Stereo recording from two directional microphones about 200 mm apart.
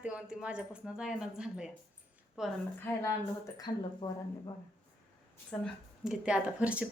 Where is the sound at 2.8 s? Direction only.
15° left (ahead or behind).